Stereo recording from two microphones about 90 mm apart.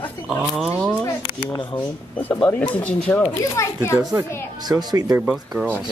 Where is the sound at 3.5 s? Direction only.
30° left (ahead or behind).